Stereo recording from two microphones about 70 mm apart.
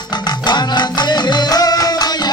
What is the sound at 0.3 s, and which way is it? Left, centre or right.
Music, left.